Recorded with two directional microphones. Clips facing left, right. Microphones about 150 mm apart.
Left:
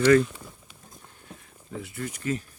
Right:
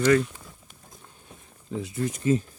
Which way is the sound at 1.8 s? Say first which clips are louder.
Right 6 dB; 20° right (ahead or behind).